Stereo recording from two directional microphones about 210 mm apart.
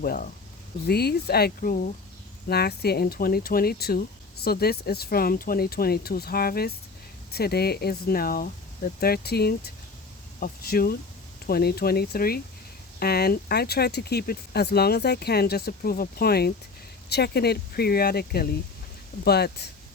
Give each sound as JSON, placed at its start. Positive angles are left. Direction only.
{"t": 0.0, "sound": "speech", "side_deg": 45}